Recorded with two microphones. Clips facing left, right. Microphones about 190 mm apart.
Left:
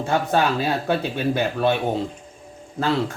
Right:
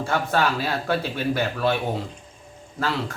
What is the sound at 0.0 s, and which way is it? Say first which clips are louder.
Speech: left 2 dB; 20° left (ahead or behind).